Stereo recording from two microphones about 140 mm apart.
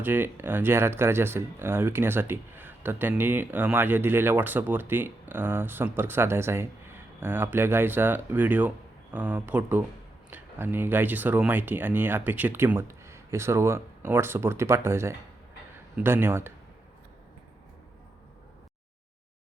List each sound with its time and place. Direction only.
0.0 s speech: 15° right (ahead or behind)